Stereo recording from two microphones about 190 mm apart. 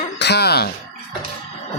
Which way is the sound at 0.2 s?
60° left (ahead or behind).